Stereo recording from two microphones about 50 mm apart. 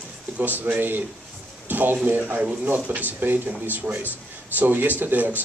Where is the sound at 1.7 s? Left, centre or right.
Right.